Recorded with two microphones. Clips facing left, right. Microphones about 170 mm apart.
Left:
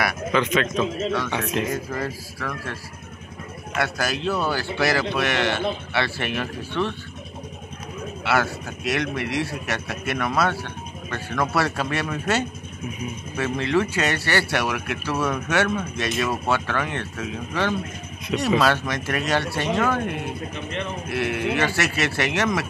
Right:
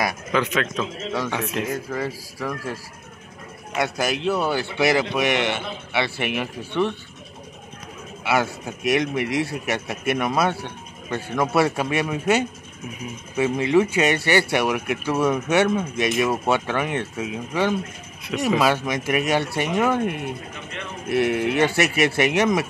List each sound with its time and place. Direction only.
0.0 s speech: 10° right (ahead or behind)
8.2 s speech: 15° right (ahead or behind)
21.1 s speech: 20° right (ahead or behind)